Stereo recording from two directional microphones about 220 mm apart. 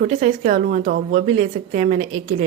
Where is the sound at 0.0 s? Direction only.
35° right (ahead or behind).